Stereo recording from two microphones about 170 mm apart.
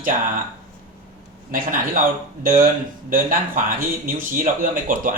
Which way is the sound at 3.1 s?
55° right (ahead or behind).